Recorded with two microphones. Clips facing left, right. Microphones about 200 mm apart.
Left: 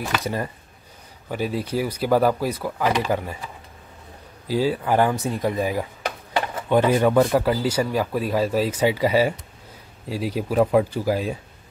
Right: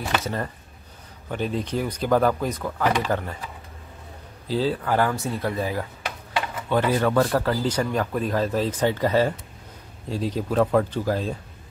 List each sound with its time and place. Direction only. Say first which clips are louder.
0.2 s speech: left 2 dB; 10° left (ahead or behind)
4.5 s speech: left 2 dB; 10° left (ahead or behind)